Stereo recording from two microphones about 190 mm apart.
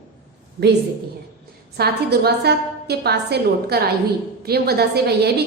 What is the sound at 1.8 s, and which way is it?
A woman's voice, 55° right (ahead or behind).